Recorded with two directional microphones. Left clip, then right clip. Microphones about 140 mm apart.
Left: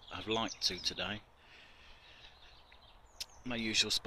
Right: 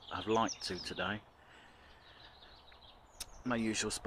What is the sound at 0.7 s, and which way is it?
Speech, centre (ahead or behind).